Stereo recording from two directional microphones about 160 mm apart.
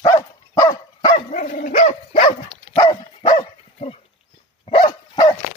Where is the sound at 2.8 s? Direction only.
30° left (ahead or behind).